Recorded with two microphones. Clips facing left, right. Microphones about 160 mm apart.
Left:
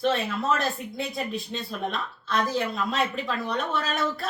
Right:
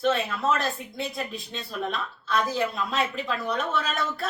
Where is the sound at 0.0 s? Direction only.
Centre (ahead or behind).